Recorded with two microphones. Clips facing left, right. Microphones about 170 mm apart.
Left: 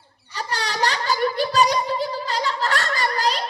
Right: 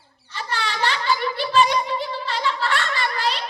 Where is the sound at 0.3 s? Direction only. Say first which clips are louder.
Left 1 dB; 40° left (ahead or behind).